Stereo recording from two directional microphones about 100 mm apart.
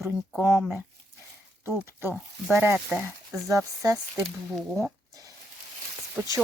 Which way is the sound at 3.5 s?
35° right (ahead or behind).